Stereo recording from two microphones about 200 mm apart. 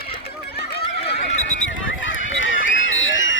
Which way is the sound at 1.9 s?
75° left (ahead or behind).